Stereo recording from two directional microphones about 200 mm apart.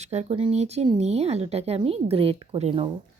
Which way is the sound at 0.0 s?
35° right (ahead or behind).